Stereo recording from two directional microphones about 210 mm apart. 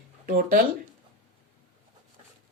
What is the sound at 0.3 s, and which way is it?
Speech, 45° right (ahead or behind).